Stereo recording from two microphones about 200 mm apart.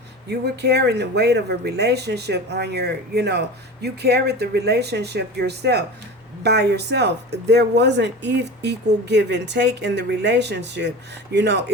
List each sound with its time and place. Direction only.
0.3 s speech: 55° right (ahead or behind)